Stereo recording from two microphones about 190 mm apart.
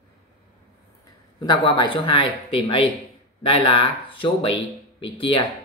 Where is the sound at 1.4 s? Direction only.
25° left (ahead or behind).